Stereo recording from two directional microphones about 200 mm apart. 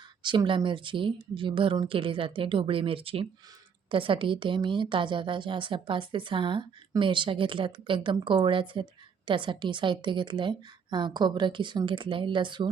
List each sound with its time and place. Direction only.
0.2 s a woman's voice: 25° right (ahead or behind)